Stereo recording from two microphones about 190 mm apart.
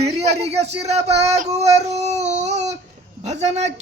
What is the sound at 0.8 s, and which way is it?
Child singing, 35° right (ahead or behind).